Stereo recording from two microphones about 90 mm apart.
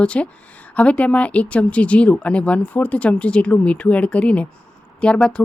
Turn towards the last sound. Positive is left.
turn(degrees=10)  # may be behind; listen again after turning